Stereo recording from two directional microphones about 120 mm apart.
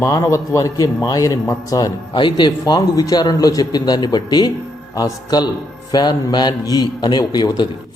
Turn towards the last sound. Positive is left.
turn(degrees=35)  # may be behind; listen again after turning